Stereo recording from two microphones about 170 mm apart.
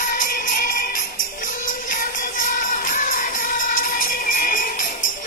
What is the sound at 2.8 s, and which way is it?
Music, 50° left (ahead or behind).